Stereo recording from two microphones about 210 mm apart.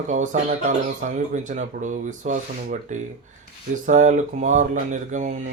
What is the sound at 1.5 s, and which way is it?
A man's voice, 35° right (ahead or behind).